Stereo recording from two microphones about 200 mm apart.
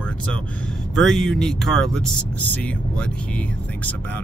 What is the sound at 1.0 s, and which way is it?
Speech, centre (ahead or behind).